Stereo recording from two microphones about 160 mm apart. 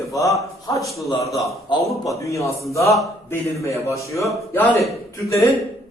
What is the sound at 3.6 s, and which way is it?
Speech, 20° left (ahead or behind).